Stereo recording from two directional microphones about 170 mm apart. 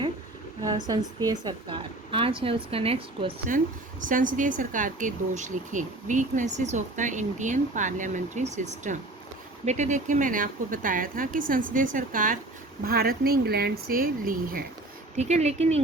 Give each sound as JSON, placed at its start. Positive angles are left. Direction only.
{"t": 0.6, "sound": "speech", "side_deg": -20}
{"t": 4.0, "sound": "speech", "side_deg": -50}
{"t": 12.8, "sound": "speech", "side_deg": -65}
{"t": 15.1, "sound": "speech", "side_deg": -40}